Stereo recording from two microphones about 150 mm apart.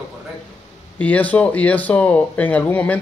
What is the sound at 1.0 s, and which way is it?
Speech, 10° left (ahead or behind).